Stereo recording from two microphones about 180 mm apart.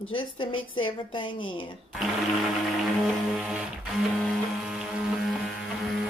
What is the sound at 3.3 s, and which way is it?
Music, 5° right (ahead or behind).